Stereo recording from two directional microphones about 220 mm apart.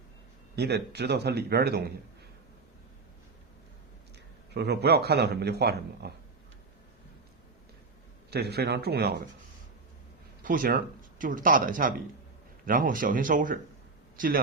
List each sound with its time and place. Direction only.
0.5 s speech: 50° right (ahead or behind)
4.5 s speech: 50° right (ahead or behind)
8.3 s speech: 50° right (ahead or behind)
10.4 s speech: 40° right (ahead or behind)